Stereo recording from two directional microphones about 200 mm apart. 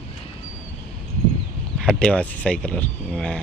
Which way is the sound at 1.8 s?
5° left (ahead or behind).